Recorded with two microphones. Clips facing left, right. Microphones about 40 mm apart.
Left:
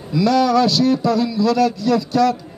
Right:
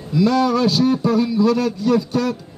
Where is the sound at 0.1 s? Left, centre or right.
Left.